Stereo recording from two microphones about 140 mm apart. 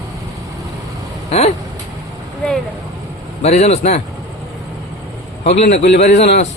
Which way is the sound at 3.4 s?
50° left (ahead or behind).